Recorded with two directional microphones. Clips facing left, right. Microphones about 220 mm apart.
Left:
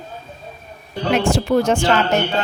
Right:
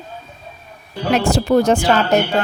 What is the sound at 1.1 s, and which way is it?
Speech, 40° right (ahead or behind).